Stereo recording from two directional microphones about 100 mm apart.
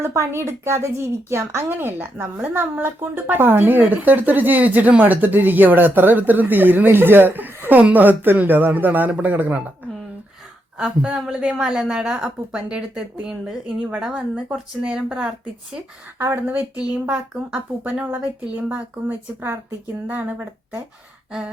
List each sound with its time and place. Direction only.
0.0 s a woman's voice: 25° right (ahead or behind)
10.8 s a woman's voice: 5° right (ahead or behind)
16.1 s a woman's voice: 20° right (ahead or behind)